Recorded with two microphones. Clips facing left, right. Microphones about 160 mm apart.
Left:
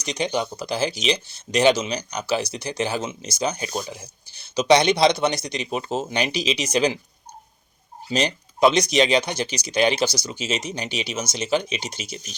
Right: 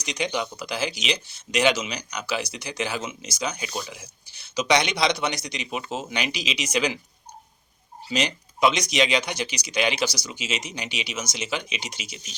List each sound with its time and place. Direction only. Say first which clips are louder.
0.1 s a man's voice: left 3 dB; 25° left (ahead or behind)
4.0 s a man's voice: left 3 dB; 25° left (ahead or behind)
8.1 s a man's voice: left 3 dB; 30° left (ahead or behind)
12.0 s speech: left 5 dB; 40° left (ahead or behind)